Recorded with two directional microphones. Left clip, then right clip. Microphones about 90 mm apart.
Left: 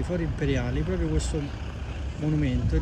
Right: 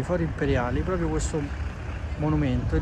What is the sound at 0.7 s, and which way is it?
Speech, 10° left (ahead or behind).